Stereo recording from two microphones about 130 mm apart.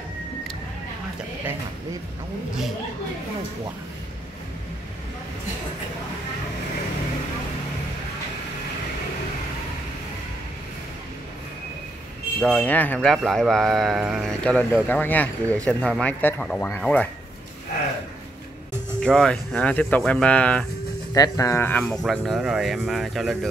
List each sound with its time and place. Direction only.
12.4 s speech: 10° left (ahead or behind)
13.1 s speech: centre (ahead or behind)
14.4 s speech: 10° left (ahead or behind)
18.9 s speech: 5° left (ahead or behind)
21.1 s speech: 25° left (ahead or behind)
21.8 s speech: centre (ahead or behind)